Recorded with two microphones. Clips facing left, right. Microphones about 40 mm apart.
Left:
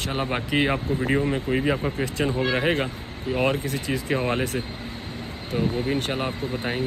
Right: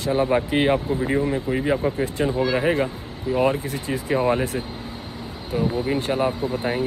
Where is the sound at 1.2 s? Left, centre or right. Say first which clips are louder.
Right 1 dB; centre.